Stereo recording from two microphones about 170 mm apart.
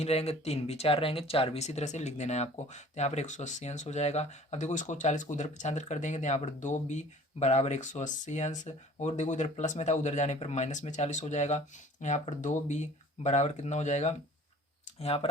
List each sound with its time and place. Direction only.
0.0 s speech: 35° left (ahead or behind)